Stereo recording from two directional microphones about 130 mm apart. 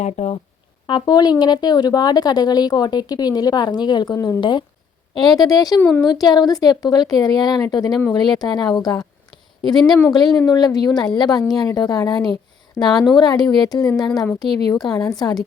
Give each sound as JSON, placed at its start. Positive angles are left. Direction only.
{"t": 0.0, "sound": "speech", "side_deg": 55}
{"t": 0.9, "sound": "a woman's voice", "side_deg": 35}
{"t": 12.3, "sound": "a sound", "side_deg": 30}
{"t": 13.1, "sound": "a woman's voice", "side_deg": 35}